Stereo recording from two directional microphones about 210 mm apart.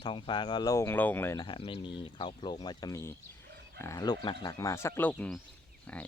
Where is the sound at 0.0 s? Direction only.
25° left (ahead or behind).